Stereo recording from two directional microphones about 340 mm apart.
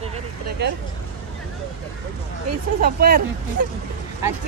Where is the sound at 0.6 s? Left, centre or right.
Right.